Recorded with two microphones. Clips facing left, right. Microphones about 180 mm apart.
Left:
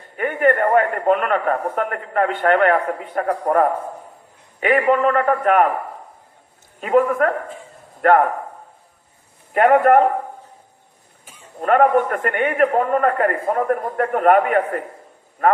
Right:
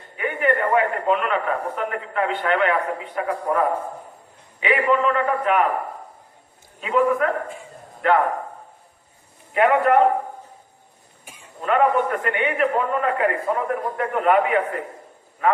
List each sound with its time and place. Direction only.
0.2 s a man's voice: 50° left (ahead or behind)
6.7 s a man's voice: 50° left (ahead or behind)
9.6 s a man's voice: 50° left (ahead or behind)
11.3 s a sound: 15° right (ahead or behind)
11.6 s a man's voice: 50° left (ahead or behind)